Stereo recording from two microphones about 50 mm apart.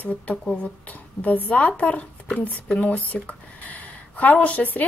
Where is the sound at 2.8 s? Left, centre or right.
Left.